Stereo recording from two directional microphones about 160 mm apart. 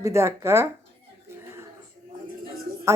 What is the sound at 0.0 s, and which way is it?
Speech, 15° right (ahead or behind).